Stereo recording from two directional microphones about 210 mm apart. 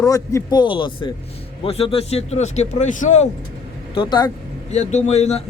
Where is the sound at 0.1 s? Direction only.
15° left (ahead or behind); by 3.2 s 35° left (ahead or behind).